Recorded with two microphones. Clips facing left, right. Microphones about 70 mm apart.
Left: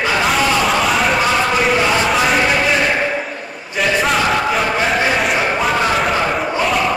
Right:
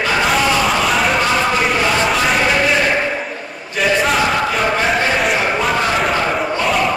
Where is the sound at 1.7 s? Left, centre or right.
Centre.